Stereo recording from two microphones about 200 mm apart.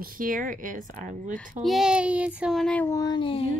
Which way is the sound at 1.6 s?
Centre (ahead or behind).